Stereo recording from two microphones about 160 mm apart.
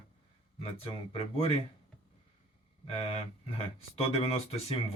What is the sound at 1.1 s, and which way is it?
Speech, 35° left (ahead or behind).